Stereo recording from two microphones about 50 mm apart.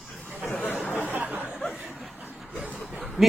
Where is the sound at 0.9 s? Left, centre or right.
Right.